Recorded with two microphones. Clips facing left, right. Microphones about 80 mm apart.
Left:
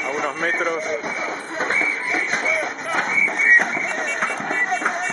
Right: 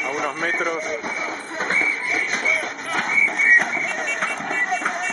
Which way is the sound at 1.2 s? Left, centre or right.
Centre.